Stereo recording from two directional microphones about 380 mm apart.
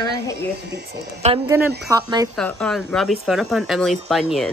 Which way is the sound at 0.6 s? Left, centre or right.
Right.